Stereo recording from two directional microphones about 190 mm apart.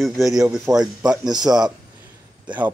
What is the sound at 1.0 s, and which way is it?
Speech, 20° right (ahead or behind).